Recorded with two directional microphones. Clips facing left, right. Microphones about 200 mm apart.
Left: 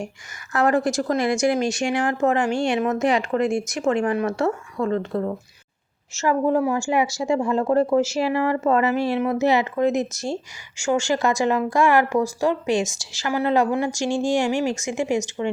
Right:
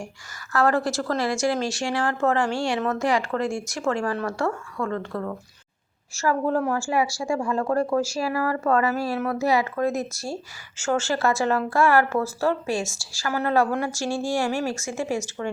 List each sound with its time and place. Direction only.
0.5 s speech: 20° left (ahead or behind)